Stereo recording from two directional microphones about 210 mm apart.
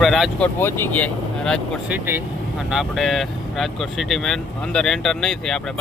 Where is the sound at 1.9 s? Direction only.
10° right (ahead or behind).